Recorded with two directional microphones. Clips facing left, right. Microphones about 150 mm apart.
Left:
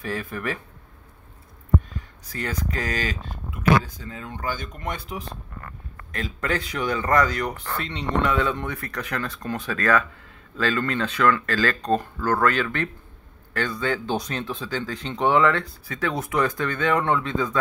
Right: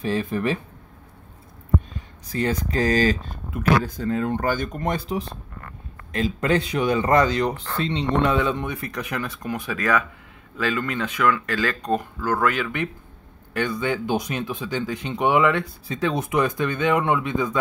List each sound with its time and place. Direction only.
0.0 s speech: 25° right (ahead or behind)
2.3 s speech: 25° right (ahead or behind)
3.8 s speech: 65° right (ahead or behind); by 5.2 s 35° right (ahead or behind)
6.1 s speech: 25° right (ahead or behind)